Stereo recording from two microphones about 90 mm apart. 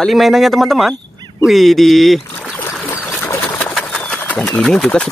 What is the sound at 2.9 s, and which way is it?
Trickle, 30° left (ahead or behind).